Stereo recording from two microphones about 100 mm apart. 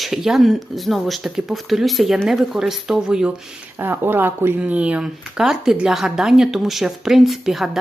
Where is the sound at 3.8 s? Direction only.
20° right (ahead or behind).